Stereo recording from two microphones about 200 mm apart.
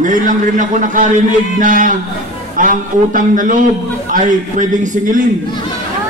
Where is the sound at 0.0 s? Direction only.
40° right (ahead or behind).